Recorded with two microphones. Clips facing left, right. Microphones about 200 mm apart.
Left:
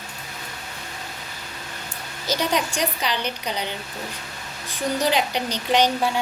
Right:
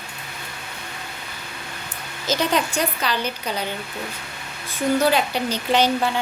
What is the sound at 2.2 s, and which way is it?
Speech, 10° left (ahead or behind).